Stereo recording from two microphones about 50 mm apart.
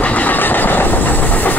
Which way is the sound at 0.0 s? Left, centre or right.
Left.